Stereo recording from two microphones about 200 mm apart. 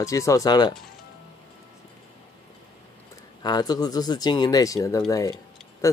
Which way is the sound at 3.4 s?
20° left (ahead or behind).